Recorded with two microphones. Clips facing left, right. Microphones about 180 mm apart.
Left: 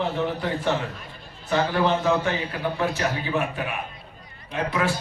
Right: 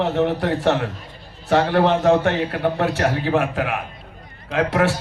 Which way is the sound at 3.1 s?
90° right.